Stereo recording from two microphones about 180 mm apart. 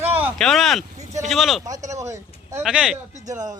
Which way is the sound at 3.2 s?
20° right (ahead or behind).